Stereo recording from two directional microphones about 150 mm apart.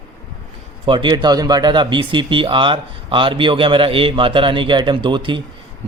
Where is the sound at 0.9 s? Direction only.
30° right (ahead or behind).